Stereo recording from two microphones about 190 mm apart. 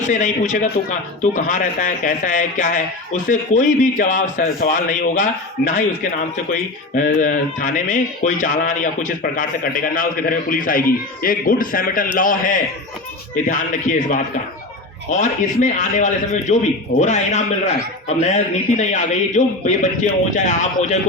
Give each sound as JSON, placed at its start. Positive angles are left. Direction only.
{"t": 0.0, "sound": "a man's voice", "side_deg": 40}
{"t": 13.9, "sound": "a man's voice", "side_deg": 40}
{"t": 15.1, "sound": "a man's voice", "side_deg": 40}